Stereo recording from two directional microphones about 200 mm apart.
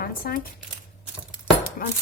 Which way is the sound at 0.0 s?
45° left (ahead or behind).